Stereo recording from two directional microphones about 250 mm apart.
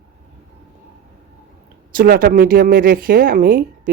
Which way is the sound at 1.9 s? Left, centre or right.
Right.